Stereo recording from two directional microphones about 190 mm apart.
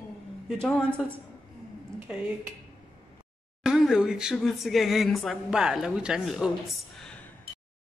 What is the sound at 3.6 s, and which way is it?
Speech, 5° right (ahead or behind).